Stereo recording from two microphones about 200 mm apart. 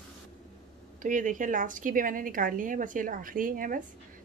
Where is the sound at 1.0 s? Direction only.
40° right (ahead or behind).